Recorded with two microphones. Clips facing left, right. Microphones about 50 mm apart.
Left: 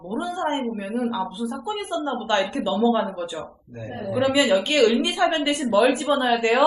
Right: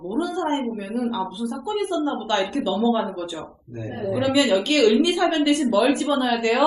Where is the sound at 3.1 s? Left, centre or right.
Left.